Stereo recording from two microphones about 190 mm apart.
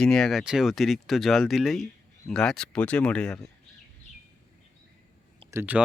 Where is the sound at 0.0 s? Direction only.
5° left (ahead or behind).